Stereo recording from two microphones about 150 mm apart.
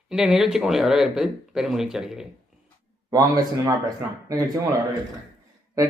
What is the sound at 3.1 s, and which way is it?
Speech, 25° right (ahead or behind).